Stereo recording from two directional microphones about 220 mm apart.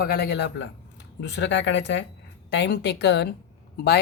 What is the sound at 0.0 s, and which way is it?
Speech, 45° left (ahead or behind).